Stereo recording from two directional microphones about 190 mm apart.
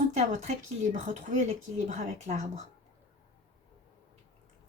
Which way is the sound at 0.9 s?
40° right (ahead or behind).